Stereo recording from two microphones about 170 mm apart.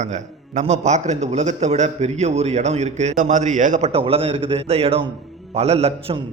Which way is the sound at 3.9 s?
35° right (ahead or behind).